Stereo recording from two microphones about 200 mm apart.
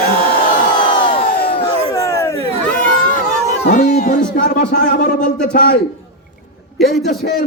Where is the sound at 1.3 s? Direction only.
50° left (ahead or behind).